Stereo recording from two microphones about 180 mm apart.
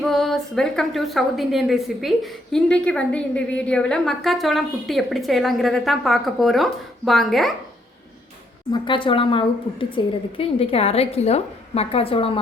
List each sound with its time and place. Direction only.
0.0 s a woman's voice: centre (ahead or behind)
8.7 s a woman's voice: 25° left (ahead or behind)